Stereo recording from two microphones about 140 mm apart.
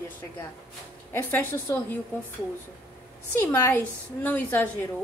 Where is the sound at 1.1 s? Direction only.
15° left (ahead or behind).